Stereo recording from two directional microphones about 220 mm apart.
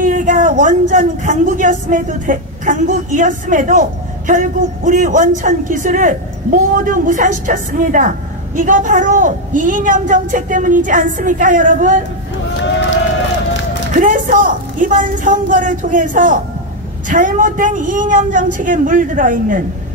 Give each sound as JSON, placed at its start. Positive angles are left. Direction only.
{"t": 0.0, "sound": "speech", "side_deg": -35}
{"t": 13.9, "sound": "speech", "side_deg": -35}